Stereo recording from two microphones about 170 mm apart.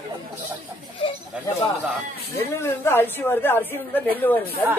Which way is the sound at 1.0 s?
35° left (ahead or behind).